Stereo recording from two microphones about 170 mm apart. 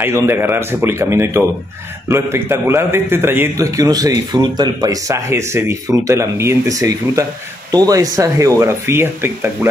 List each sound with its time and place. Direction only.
0.0 s a man's voice: 15° right (ahead or behind)